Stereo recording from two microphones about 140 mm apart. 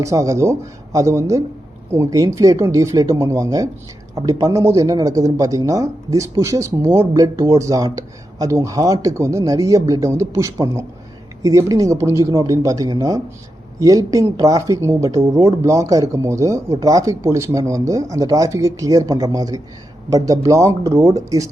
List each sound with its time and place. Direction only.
0.0 s speech: 25° right (ahead or behind)